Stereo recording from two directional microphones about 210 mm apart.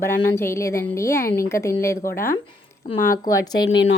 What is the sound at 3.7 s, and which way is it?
Speech, 60° left (ahead or behind).